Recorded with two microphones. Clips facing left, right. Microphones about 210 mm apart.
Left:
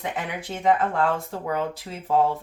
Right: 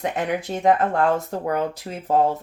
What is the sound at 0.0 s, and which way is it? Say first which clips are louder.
Speech: right 6 dB; 40° right (ahead or behind).